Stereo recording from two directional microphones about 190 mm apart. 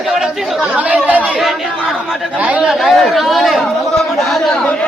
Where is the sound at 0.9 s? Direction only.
10° right (ahead or behind).